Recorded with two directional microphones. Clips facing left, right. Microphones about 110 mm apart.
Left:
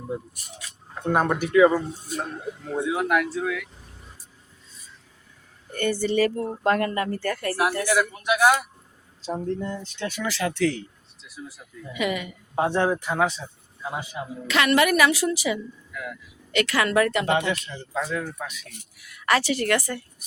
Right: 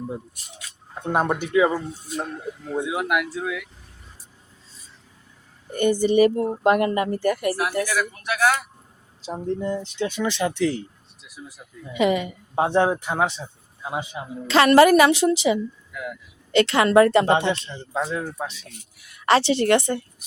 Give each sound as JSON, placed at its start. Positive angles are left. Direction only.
{"t": 1.0, "sound": "speech", "side_deg": -20}
{"t": 2.8, "sound": "speech", "side_deg": -15}
{"t": 5.7, "sound": "speech", "side_deg": -15}
{"t": 8.2, "sound": "speech", "side_deg": 15}
{"t": 9.2, "sound": "speech", "side_deg": -15}
{"t": 11.9, "sound": "speech", "side_deg": -30}
{"t": 16.5, "sound": "speech", "side_deg": -30}